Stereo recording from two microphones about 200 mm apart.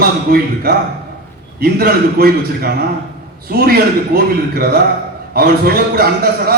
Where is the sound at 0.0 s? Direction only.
50° right (ahead or behind).